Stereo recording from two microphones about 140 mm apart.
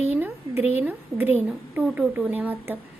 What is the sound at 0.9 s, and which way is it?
A woman's voice, 15° right (ahead or behind).